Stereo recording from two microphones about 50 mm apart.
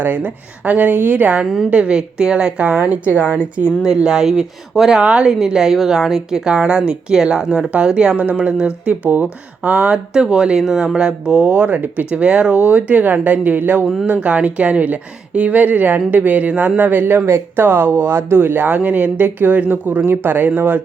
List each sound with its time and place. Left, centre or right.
0.0 s speech: right; by 2.5 s centre
2.8 s a woman's voice: right; by 4.9 s centre
4.9 s a woman's voice: right
5.3 s a woman's voice: centre; by 10.0 s right
10.2 s speech: centre
11.4 s speech: right
14.1 s a woman's voice: right